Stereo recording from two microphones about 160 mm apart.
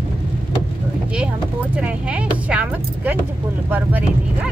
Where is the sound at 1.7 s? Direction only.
10° right (ahead or behind).